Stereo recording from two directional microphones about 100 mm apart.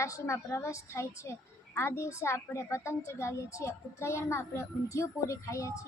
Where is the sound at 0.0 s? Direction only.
30° left (ahead or behind).